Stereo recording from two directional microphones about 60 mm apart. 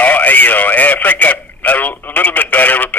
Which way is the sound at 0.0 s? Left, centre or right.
Left.